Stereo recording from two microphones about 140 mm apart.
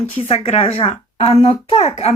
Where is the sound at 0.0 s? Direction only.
50° left (ahead or behind).